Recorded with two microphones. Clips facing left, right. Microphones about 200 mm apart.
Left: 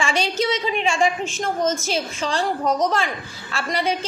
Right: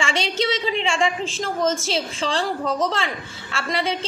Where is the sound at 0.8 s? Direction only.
30° right (ahead or behind).